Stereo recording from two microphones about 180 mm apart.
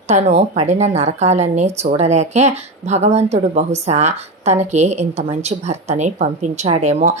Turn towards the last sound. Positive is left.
turn(degrees=-40)  # may be behind; listen again after turning